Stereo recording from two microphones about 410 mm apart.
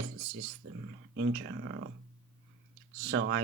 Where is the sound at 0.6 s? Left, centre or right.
Right.